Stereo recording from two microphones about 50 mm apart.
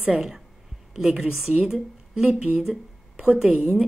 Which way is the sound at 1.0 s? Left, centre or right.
Right.